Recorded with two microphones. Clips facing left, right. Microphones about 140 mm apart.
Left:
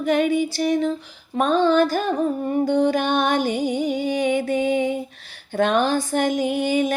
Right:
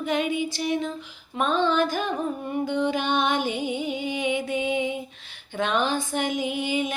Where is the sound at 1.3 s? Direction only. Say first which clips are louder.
Left 5 dB; 40° left (ahead or behind).